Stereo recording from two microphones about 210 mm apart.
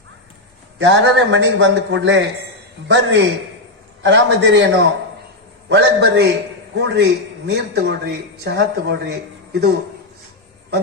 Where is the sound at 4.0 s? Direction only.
55° right (ahead or behind).